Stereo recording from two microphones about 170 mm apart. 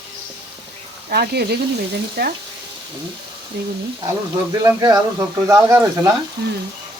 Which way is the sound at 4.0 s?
20° right (ahead or behind).